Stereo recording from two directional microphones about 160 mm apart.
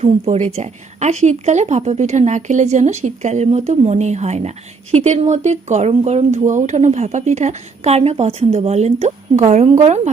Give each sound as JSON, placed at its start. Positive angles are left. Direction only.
{"t": 0.0, "sound": "speech", "side_deg": -45}